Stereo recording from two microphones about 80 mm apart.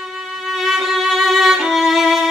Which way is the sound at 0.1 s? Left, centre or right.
Centre.